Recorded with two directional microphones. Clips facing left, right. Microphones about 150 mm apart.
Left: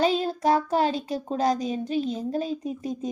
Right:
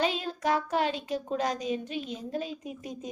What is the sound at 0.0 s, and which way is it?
Speech, 35° left (ahead or behind).